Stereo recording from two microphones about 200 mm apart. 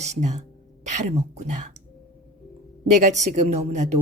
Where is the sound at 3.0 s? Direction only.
35° right (ahead or behind).